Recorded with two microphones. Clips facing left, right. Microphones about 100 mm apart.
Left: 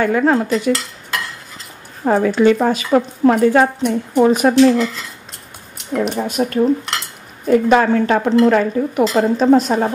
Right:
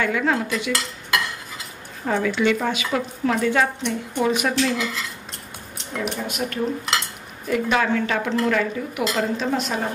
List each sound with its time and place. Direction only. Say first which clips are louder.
0.0 s speech: left 7 dB; 40° left (ahead or behind)
2.0 s speech: left 8 dB; 40° left (ahead or behind)
4.7 s cutlery: left 8 dB; centre (ahead or behind)
5.9 s speech: left 8 dB; 40° left (ahead or behind)